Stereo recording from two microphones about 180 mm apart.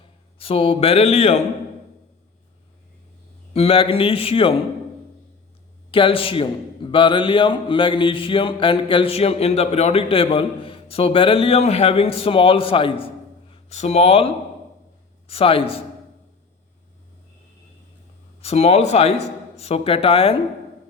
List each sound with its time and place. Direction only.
0.3 s speech: 30° left (ahead or behind)
3.5 s speech: 30° left (ahead or behind)
5.9 s a man's voice: 30° left (ahead or behind)
18.3 s speech: 35° left (ahead or behind)